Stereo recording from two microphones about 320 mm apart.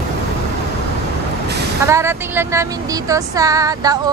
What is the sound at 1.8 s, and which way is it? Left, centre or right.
Speech, centre.